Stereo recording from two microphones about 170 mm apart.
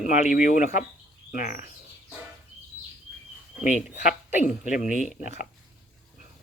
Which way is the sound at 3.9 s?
45° left (ahead or behind).